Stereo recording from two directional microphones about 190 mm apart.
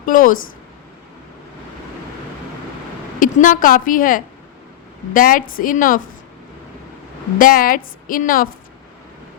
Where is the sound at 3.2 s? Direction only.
45° left (ahead or behind).